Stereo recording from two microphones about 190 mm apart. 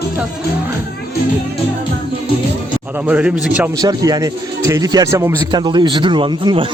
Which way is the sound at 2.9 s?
5° right (ahead or behind).